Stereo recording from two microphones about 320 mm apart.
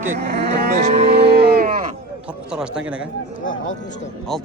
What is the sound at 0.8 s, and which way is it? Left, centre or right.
Cattle, right.